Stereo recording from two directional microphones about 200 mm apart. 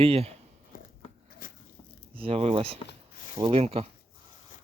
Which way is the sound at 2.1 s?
30° right (ahead or behind).